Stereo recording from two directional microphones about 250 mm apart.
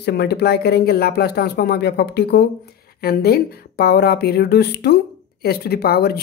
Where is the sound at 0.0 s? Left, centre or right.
Left.